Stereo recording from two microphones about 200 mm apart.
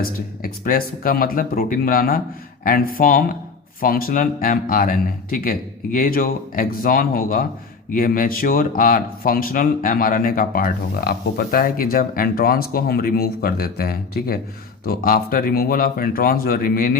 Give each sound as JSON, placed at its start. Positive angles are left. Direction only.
{"t": 0.0, "sound": "speech", "side_deg": 45}